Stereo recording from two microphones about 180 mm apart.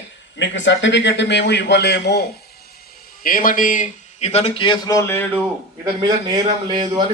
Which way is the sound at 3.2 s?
50° left (ahead or behind).